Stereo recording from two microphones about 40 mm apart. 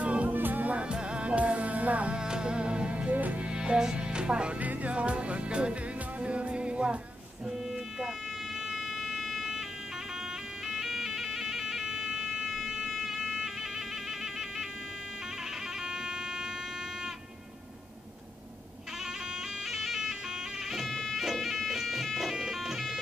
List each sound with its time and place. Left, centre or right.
0.0 s music: right
0.3 s music: right
0.7 s music: right
2.1 s music: right
3.1 s music: right
3.4 s music: right
4.6 s music: right
8.6 s music: centre
10.7 s music: centre
15.9 s music: centre
19.7 s music: centre
20.7 s bagpipes: centre